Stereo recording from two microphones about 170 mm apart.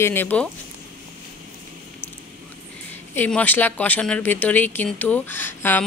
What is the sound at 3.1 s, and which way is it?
Speech, 10° left (ahead or behind).